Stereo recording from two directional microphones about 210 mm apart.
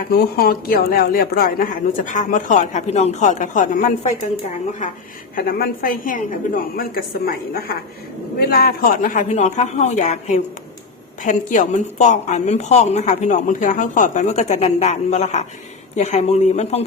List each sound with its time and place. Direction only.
0.1 s a woman's voice: 45° left (ahead or behind)
5.4 s a woman's voice: 45° left (ahead or behind)